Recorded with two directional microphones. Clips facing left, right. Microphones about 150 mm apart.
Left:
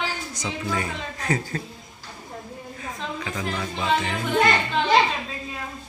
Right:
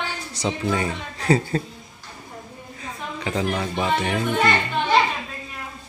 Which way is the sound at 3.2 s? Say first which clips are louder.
Right 8 dB; 35° right (ahead or behind).